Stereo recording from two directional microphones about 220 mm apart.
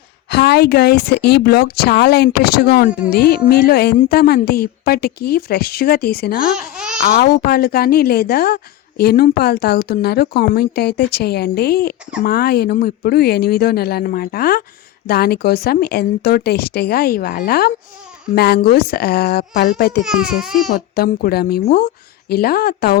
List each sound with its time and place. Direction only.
0.3 s a woman's voice: 50° left (ahead or behind)
6.7 s babbling: 5° right (ahead or behind)
7.1 s a woman's voice: 45° left (ahead or behind)
20.1 s speech: centre (ahead or behind)
20.7 s a woman's voice: 45° left (ahead or behind)